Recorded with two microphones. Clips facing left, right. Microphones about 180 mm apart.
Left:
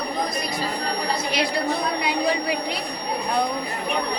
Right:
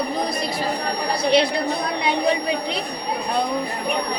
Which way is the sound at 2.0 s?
25° right (ahead or behind).